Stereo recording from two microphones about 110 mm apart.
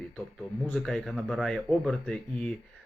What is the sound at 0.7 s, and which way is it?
Speech, 5° left (ahead or behind).